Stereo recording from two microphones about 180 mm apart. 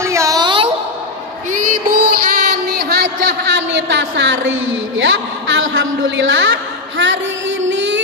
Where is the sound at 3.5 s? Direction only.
75° right (ahead or behind).